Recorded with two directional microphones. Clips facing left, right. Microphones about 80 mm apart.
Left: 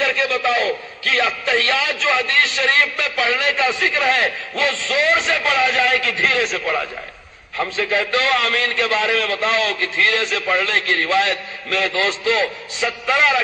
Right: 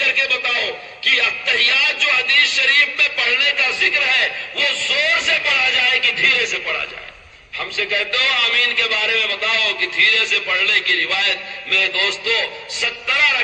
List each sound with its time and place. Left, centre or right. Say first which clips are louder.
0.0 s a man's voice: left 3 dB; left